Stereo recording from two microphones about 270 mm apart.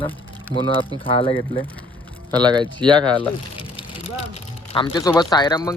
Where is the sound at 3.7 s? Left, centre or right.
Centre.